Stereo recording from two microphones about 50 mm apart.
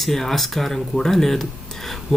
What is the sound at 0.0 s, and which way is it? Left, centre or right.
Speech, centre.